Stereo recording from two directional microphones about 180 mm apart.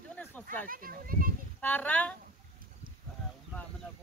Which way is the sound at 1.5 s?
10° left (ahead or behind).